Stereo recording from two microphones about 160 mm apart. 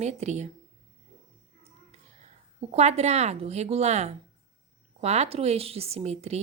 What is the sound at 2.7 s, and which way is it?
A woman's voice, 40° right (ahead or behind).